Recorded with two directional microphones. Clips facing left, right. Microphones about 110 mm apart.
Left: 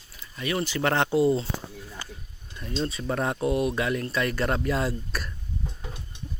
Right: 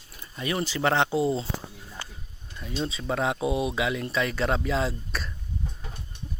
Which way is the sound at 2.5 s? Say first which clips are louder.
Left 1 dB; 10° right (ahead or behind).